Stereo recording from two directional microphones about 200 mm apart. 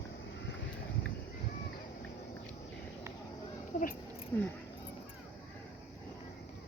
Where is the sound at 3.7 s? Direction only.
45° left (ahead or behind).